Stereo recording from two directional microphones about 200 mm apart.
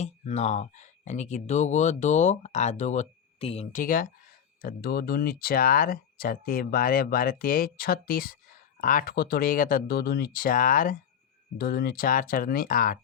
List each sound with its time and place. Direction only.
0.0 s speech: 35° left (ahead or behind)